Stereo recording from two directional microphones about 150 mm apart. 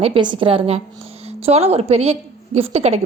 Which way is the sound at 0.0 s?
35° right (ahead or behind).